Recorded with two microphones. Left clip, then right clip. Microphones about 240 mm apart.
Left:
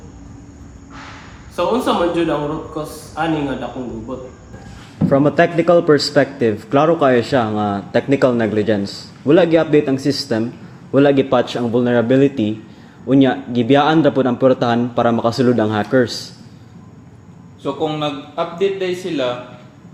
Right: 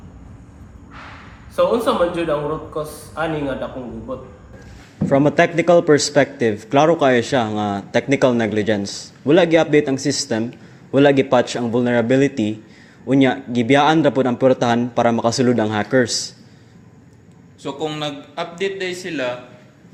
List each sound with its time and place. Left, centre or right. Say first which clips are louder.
1.5 s a man's voice: even; centre
5.0 s a man's voice: left 1 dB; right
17.6 s a man's voice: left 4 dB; right